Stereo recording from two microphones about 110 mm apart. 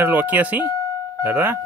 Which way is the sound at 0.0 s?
15° right (ahead or behind).